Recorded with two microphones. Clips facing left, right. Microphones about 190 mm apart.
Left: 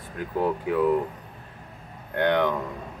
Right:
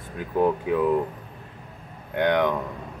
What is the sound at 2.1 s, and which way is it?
Speech, 15° right (ahead or behind).